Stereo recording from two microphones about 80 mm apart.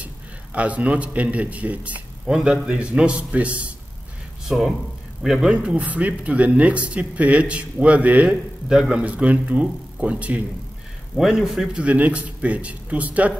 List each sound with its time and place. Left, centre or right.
0.0 s a man's voice: centre
4.5 s a man's voice: centre
11.1 s a man's voice: centre